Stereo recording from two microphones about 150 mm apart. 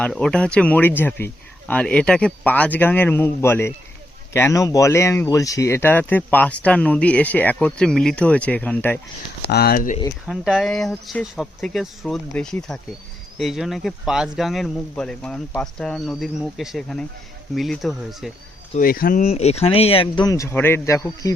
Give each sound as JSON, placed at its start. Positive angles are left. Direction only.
{"t": 0.0, "sound": "speech", "side_deg": 5}
{"t": 9.5, "sound": "speech", "side_deg": 90}
{"t": 10.2, "sound": "speech", "side_deg": 0}
{"t": 18.8, "sound": "speech", "side_deg": 75}
{"t": 19.2, "sound": "speech", "side_deg": 45}
{"t": 20.2, "sound": "speech", "side_deg": 20}